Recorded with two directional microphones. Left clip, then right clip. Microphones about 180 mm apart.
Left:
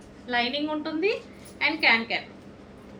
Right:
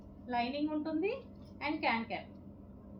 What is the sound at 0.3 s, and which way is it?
A woman's voice, 20° left (ahead or behind).